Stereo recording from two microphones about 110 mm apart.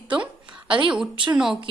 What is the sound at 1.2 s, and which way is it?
Speech, 5° right (ahead or behind).